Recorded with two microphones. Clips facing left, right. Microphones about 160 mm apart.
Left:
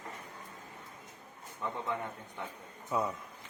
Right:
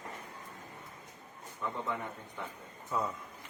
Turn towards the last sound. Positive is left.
turn(degrees=15)  # may be behind; listen again after turning